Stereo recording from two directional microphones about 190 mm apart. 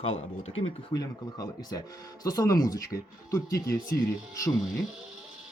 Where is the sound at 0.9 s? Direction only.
20° left (ahead or behind).